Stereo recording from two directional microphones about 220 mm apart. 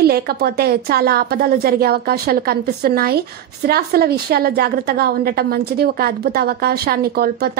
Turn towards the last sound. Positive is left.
turn(degrees=-45)  # may be behind; listen again after turning